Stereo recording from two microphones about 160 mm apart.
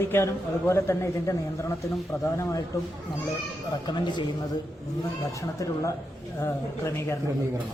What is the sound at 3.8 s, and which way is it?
Speech, 30° left (ahead or behind).